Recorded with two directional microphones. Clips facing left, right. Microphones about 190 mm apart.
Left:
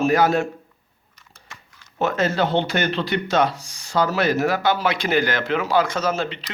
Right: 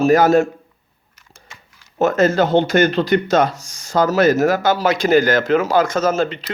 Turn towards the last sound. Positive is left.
turn(degrees=-45)  # may be behind; listen again after turning